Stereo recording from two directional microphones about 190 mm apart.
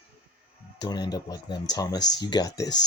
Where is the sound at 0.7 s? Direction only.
20° left (ahead or behind).